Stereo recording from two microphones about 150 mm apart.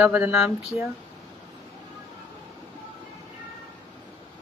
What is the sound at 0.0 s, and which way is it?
Speech, 5° right (ahead or behind).